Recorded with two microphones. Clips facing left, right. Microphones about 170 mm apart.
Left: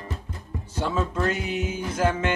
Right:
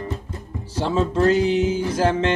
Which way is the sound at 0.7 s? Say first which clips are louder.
Right 5 dB; 35° right (ahead or behind).